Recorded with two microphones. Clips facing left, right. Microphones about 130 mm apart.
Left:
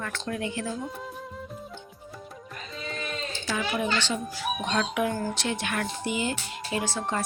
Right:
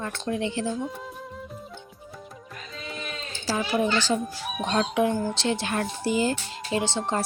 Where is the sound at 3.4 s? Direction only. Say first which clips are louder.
Right 4 dB; 35° right (ahead or behind).